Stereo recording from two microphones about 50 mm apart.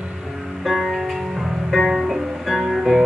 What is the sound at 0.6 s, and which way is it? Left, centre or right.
Music, centre.